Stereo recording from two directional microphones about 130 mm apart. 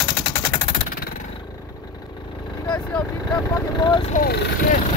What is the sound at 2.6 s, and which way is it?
Speech, 10° left (ahead or behind).